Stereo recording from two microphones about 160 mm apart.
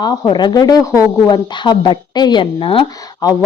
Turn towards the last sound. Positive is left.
turn(degrees=25)  # may be behind; listen again after turning